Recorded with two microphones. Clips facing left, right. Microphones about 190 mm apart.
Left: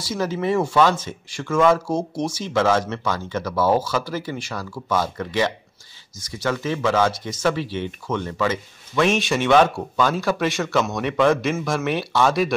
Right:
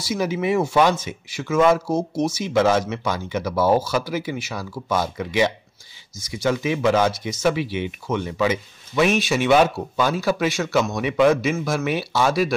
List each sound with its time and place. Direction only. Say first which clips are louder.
0.0 s speech: right 1 dB; 10° right (ahead or behind)